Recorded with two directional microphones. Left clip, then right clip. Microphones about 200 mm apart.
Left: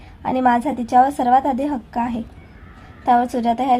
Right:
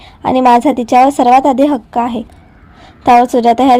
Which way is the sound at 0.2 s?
40° right (ahead or behind).